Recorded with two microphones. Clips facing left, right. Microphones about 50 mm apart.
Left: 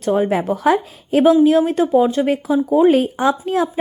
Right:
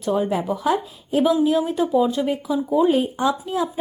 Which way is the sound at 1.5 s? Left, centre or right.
Left.